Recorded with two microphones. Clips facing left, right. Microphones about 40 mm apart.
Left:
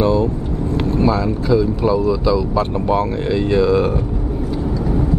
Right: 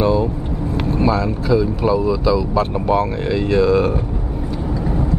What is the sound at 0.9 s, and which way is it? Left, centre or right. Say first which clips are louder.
Speech: even; centre.